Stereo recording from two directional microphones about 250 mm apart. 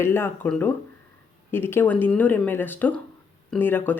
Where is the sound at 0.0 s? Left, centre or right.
Centre.